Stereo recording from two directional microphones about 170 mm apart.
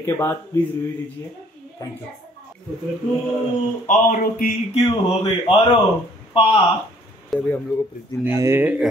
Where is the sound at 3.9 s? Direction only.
55° left (ahead or behind).